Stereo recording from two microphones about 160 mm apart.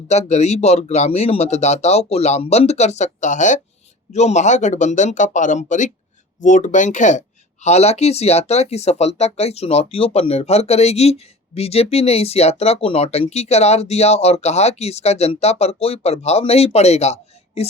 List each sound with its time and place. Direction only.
0.1 s speech: 45° left (ahead or behind)